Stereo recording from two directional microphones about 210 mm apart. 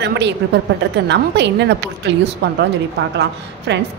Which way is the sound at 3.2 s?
55° right (ahead or behind).